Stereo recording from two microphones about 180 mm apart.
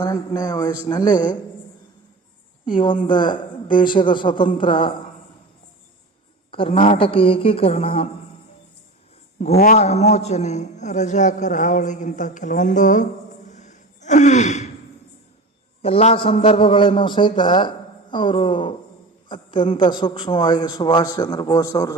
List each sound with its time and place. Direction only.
0.0 s a man's voice: 20° left (ahead or behind)
2.6 s a woman's voice: 25° left (ahead or behind)
6.5 s a man's voice: 30° left (ahead or behind)
9.6 s a man's voice: 40° left (ahead or behind)
13.5 s gasp: 40° left (ahead or behind)
15.8 s a man's voice: 35° left (ahead or behind); by 21.9 s 20° left (ahead or behind)